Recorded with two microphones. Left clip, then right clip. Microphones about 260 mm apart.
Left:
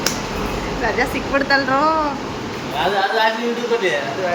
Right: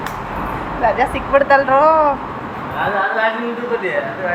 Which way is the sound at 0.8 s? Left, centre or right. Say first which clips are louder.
Right 5 dB; centre.